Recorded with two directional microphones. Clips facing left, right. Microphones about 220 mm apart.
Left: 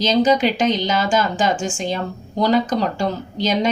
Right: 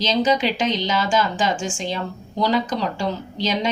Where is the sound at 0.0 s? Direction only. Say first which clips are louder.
Left 4 dB; 45° left (ahead or behind).